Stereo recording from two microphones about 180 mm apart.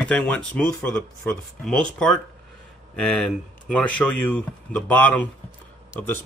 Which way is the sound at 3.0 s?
5° left (ahead or behind).